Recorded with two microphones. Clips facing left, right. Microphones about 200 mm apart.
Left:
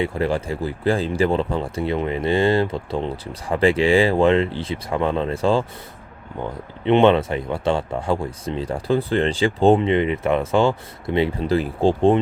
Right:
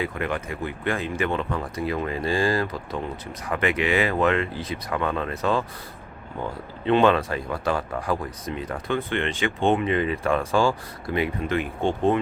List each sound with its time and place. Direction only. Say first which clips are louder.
0.0 s speech: left 6 dB; 30° left (ahead or behind)
6.8 s speech: left 4 dB; 25° left (ahead or behind)